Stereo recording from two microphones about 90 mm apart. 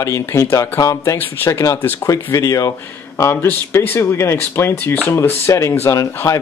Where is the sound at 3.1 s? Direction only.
25° left (ahead or behind).